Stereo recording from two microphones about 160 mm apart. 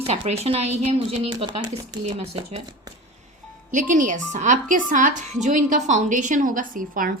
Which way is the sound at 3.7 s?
55° right (ahead or behind).